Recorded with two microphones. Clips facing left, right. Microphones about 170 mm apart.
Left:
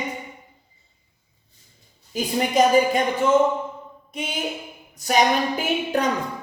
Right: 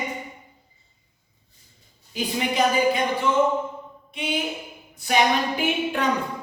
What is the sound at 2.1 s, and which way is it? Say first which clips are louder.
Speech: left 4 dB; 45° left (ahead or behind).